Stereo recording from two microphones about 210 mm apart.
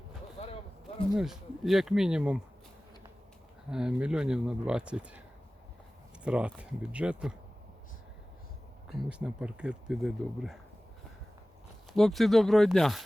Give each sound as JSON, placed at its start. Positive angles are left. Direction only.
{"t": 0.4, "sound": "a sound", "side_deg": 30}
{"t": 0.9, "sound": "speech", "side_deg": 0}
{"t": 3.7, "sound": "speech", "side_deg": -5}
{"t": 6.2, "sound": "speech", "side_deg": -5}
{"t": 8.9, "sound": "speech", "side_deg": -5}
{"t": 11.9, "sound": "speech", "side_deg": 0}